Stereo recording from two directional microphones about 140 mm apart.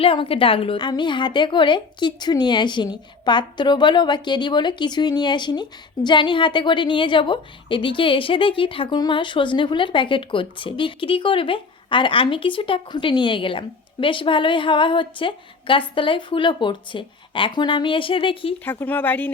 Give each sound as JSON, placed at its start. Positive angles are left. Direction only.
{"t": 0.0, "sound": "a woman's voice", "side_deg": 40}
{"t": 18.6, "sound": "speech", "side_deg": 15}